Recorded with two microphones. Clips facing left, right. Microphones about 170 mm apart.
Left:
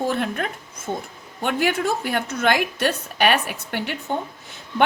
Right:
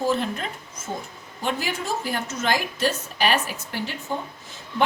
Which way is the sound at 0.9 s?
25° left (ahead or behind).